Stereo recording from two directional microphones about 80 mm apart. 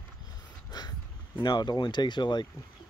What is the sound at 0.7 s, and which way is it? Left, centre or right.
Speech, left.